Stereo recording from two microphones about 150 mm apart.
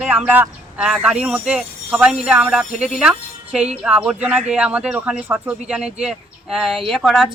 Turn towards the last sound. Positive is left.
turn(degrees=0)  # may be behind; listen again after turning